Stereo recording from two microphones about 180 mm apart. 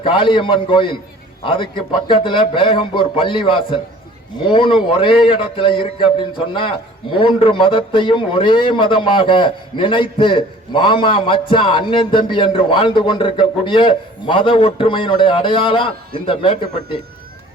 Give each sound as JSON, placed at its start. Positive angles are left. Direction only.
{"t": 0.0, "sound": "a man's voice", "side_deg": 30}